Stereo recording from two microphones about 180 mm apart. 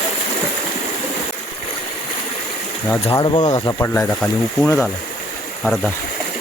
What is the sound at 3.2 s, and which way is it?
Speech, 25° left (ahead or behind).